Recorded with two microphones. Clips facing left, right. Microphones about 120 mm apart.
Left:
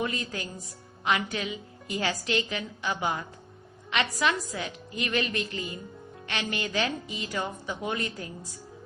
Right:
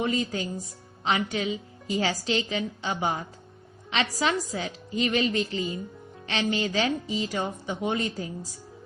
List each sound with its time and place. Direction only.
0.0 s a woman's voice: 25° right (ahead or behind)